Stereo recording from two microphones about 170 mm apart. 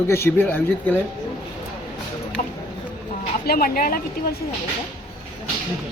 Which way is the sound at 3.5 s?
60° left (ahead or behind).